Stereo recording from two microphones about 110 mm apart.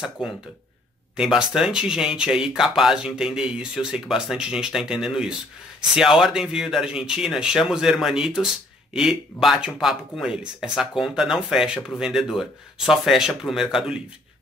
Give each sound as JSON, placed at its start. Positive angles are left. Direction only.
{"t": 0.2, "sound": "speech", "side_deg": -5}